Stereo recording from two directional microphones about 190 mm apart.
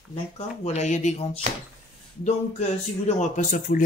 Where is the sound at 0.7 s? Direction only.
40° left (ahead or behind).